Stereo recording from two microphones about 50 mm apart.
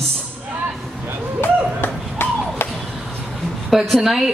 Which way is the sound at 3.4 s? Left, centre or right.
Centre.